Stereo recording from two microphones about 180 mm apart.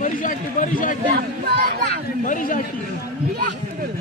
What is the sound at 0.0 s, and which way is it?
Run, 45° left (ahead or behind).